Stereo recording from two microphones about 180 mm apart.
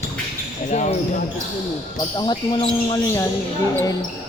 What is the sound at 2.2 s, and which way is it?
Speech, 25° left (ahead or behind).